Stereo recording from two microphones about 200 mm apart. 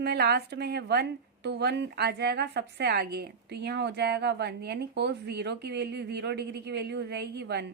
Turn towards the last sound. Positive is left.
turn(degrees=-55)  # may be behind; listen again after turning